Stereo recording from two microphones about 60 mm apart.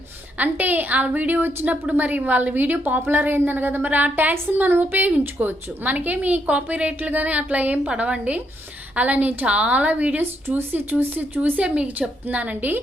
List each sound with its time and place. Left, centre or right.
0.3 s a woman's voice: right